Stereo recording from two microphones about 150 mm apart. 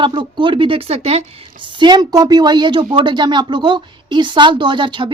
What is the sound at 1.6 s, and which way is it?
A woman's voice, 30° right (ahead or behind).